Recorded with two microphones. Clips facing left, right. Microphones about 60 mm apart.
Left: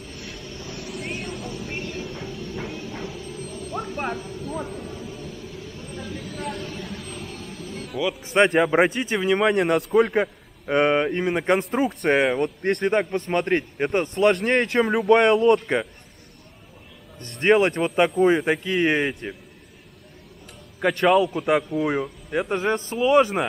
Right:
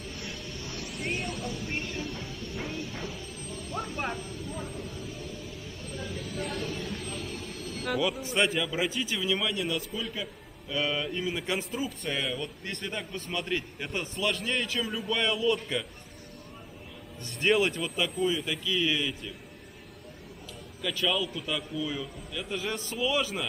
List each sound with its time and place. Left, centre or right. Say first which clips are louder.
0.2 s vehicle: left 2 dB; centre
6.2 s speech: left 1 dB; centre
8.4 s a man's voice: left 11 dB; left
17.2 s a man's voice: left 7 dB; left
20.8 s a man's voice: left 12 dB; left